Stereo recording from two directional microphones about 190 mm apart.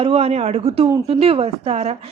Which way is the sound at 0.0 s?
30° right (ahead or behind).